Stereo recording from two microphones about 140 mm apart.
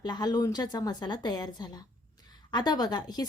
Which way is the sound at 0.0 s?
30° left (ahead or behind).